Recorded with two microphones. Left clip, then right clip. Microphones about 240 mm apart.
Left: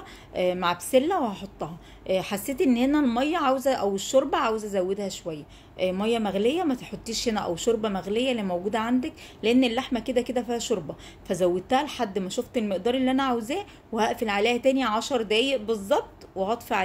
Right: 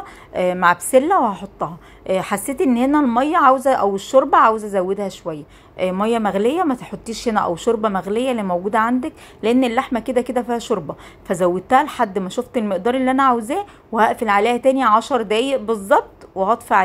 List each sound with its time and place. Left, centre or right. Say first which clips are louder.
0.0 s a woman's voice: right 6 dB; centre